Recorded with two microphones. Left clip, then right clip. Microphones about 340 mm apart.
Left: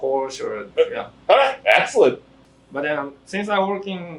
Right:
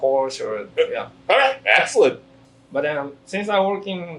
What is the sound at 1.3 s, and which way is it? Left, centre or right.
Speech, left.